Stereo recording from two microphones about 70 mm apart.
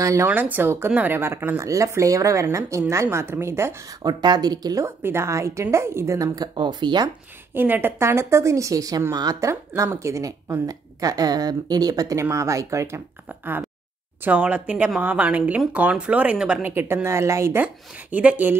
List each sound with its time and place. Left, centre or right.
0.0 s a woman's voice: right
0.3 s a woman's voice: right
1.6 s a woman's voice: right
2.9 s a woman's voice: right
4.0 s speech: right
4.8 s a woman's voice: right
6.1 s speech: right
7.5 s speech: right
8.0 s a woman's voice: right
9.9 s a woman's voice: right
13.3 s speech: right; by 16.6 s centre
16.6 s a woman's voice: right
18.1 s speech: right